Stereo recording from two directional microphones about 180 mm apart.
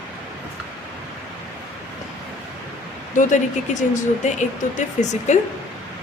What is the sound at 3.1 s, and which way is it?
A woman's voice, 45° left (ahead or behind).